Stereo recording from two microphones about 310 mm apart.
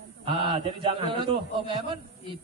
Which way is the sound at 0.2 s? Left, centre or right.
Centre.